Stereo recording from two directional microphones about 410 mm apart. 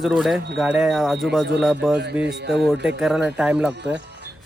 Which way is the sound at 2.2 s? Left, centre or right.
Right.